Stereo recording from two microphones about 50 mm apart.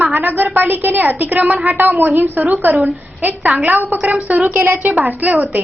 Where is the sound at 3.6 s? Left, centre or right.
Right.